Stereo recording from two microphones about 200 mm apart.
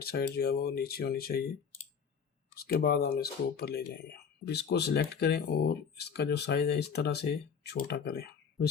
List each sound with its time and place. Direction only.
0.0 s speech: 50° left (ahead or behind)
2.6 s speech: 50° left (ahead or behind)